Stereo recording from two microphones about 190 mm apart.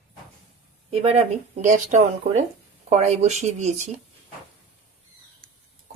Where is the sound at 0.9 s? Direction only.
30° right (ahead or behind).